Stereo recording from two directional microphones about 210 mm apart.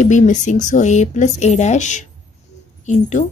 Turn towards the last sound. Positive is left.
turn(degrees=35)  # may be behind; listen again after turning